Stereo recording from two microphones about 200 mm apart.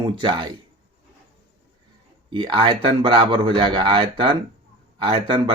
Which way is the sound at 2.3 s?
25° right (ahead or behind).